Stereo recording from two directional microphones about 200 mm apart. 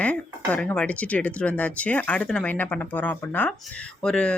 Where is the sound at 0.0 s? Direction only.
5° left (ahead or behind).